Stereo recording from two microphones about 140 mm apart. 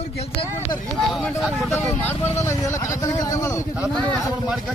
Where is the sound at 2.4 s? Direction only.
20° left (ahead or behind).